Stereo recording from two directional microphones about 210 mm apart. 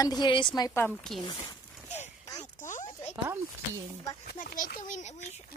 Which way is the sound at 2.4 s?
35° left (ahead or behind).